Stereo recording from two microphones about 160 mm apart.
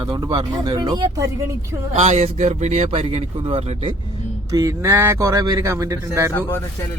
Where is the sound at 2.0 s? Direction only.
45° right (ahead or behind).